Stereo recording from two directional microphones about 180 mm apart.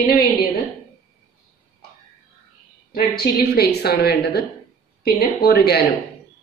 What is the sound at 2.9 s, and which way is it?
A woman's voice, 60° left (ahead or behind).